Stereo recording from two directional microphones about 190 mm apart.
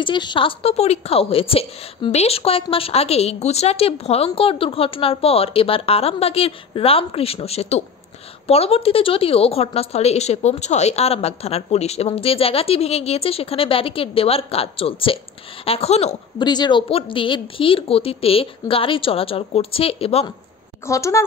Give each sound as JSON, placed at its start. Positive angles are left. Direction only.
{"t": 0.0, "sound": "a woman's voice", "side_deg": 25}
{"t": 16.4, "sound": "speech", "side_deg": 20}
{"t": 20.8, "sound": "a woman's voice", "side_deg": 15}